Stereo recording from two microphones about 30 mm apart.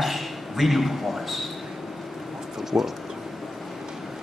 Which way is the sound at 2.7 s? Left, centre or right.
Right.